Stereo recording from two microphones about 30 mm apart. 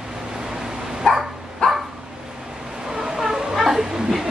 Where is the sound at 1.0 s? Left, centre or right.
Left.